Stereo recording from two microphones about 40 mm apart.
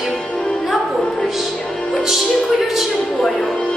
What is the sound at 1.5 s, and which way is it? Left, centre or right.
Music, centre.